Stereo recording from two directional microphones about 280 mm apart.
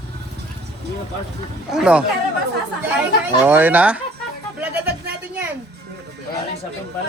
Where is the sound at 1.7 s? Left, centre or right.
Centre.